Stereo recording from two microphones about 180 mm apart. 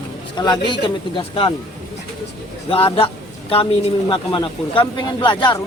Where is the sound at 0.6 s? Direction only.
25° left (ahead or behind).